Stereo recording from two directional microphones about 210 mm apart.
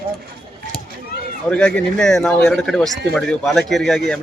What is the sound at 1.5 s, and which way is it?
A man's voice, 5° left (ahead or behind).